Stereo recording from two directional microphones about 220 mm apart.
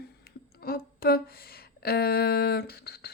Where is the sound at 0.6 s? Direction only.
45° left (ahead or behind).